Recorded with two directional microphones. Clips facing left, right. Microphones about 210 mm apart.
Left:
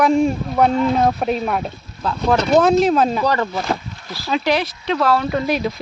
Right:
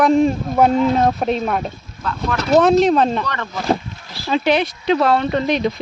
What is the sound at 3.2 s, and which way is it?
Speech, 35° left (ahead or behind).